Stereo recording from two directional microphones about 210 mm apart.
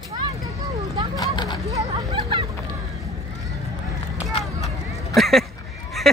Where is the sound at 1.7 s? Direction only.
20° right (ahead or behind).